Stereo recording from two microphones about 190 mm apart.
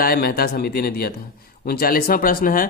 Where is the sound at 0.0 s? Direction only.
50° left (ahead or behind).